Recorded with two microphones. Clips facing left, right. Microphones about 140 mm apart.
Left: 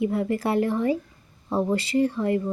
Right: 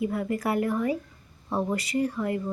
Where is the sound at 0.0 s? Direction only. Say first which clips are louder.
Left 3 dB; 25° left (ahead or behind).